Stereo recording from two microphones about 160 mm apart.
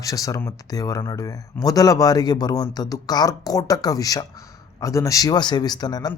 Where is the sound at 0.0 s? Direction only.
20° left (ahead or behind).